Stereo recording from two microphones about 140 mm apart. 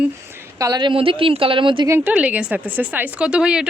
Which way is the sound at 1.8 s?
15° right (ahead or behind).